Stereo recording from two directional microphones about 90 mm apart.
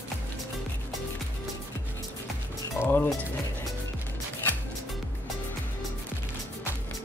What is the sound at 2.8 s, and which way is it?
Speech, 20° left (ahead or behind).